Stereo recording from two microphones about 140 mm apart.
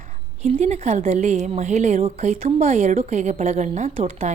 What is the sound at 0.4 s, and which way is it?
A woman's voice, 55° right (ahead or behind).